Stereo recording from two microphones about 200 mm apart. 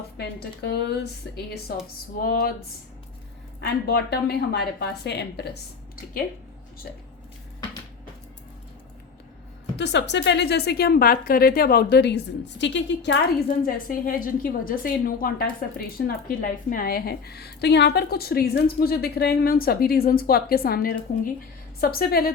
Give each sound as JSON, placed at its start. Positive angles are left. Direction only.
{"t": 0.2, "sound": "speech", "side_deg": 55}
{"t": 2.2, "sound": "a woman's voice", "side_deg": 50}
{"t": 9.7, "sound": "a woman's voice", "side_deg": 60}